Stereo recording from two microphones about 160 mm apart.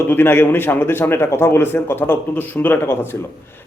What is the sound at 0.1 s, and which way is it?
A man's voice, 15° left (ahead or behind).